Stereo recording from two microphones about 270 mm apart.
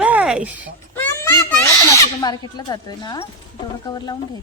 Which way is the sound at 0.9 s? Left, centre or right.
Centre.